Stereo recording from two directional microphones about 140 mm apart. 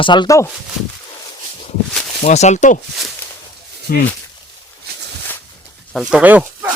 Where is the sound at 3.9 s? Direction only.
90° left.